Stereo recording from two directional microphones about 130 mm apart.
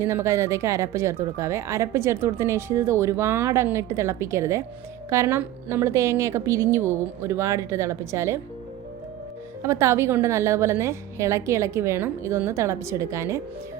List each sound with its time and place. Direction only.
0.0 s speech: 20° right (ahead or behind)
9.6 s speech: 20° right (ahead or behind)